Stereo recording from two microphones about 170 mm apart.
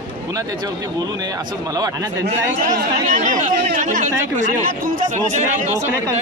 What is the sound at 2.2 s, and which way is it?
Speech, 45° right (ahead or behind).